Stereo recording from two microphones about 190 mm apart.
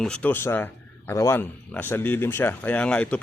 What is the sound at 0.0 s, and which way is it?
Speech, 5° left (ahead or behind).